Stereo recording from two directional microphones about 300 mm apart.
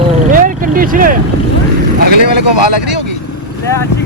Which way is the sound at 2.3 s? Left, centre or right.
Right.